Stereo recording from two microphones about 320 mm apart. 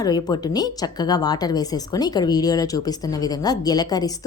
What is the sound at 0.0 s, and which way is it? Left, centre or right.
A woman's voice, centre.